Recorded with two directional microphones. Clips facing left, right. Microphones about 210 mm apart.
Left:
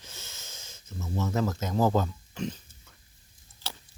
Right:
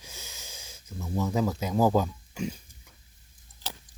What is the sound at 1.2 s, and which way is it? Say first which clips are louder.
Speech: right 2 dB; 15° right (ahead or behind).